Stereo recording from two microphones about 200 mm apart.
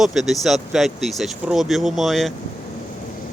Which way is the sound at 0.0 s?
Centre (ahead or behind).